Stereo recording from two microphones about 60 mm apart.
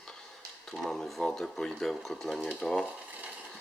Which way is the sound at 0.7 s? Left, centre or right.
Centre.